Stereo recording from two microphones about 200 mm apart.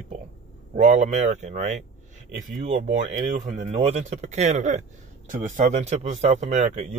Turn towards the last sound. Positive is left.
turn(degrees=-35)  # may be behind; listen again after turning